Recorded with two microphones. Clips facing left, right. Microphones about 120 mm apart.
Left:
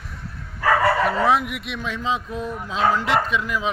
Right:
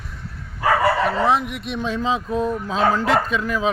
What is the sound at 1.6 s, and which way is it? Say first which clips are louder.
Speech: right 3 dB; 30° right (ahead or behind).